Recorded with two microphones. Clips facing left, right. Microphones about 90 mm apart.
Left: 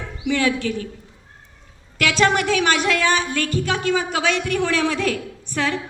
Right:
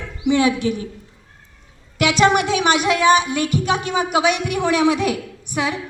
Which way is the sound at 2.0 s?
20° right (ahead or behind).